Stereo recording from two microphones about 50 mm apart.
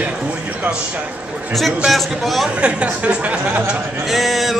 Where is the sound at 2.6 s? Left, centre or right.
Right.